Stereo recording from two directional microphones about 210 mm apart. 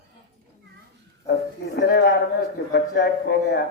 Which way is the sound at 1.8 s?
55° left (ahead or behind).